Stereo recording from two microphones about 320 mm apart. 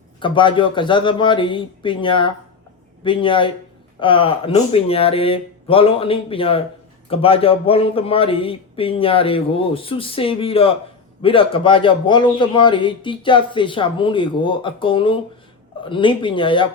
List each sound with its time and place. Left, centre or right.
0.2 s a man's voice: centre